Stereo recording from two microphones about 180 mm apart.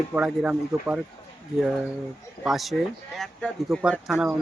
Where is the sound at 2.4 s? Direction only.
Centre (ahead or behind).